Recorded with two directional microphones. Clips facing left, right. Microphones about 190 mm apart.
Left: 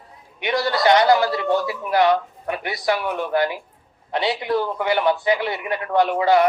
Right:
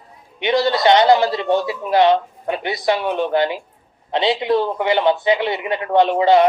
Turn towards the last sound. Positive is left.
turn(degrees=-25)  # may be behind; listen again after turning